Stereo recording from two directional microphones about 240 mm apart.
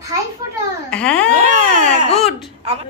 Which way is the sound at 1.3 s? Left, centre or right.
Right.